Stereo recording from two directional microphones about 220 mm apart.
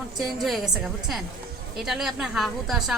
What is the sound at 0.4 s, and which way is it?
A woman's voice, centre (ahead or behind).